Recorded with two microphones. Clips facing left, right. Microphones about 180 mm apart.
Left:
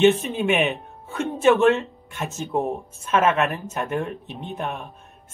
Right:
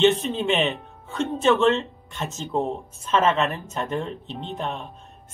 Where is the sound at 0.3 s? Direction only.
15° left (ahead or behind).